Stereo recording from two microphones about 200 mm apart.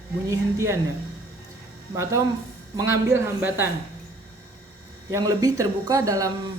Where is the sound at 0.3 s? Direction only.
15° right (ahead or behind).